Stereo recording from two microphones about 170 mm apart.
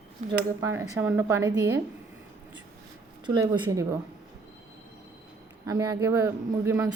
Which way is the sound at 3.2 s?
20° right (ahead or behind).